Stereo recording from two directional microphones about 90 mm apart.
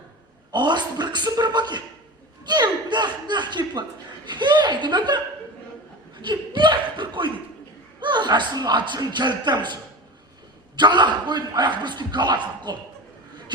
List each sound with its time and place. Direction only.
0.5 s a man's voice: 55° right (ahead or behind)
6.2 s a man's voice: 60° right (ahead or behind)
10.8 s a man's voice: 55° right (ahead or behind)